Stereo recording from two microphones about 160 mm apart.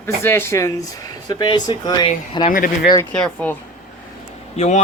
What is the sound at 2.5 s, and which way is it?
Speech, 60° left (ahead or behind).